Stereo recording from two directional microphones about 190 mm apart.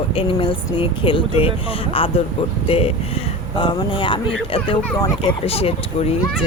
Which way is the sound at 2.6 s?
30° left (ahead or behind).